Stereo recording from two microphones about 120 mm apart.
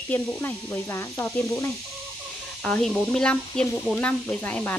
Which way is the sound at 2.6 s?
10° left (ahead or behind).